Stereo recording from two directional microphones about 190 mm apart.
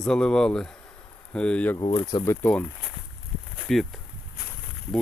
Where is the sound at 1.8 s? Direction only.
20° left (ahead or behind).